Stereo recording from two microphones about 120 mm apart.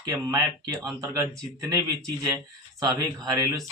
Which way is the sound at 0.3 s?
30° right (ahead or behind).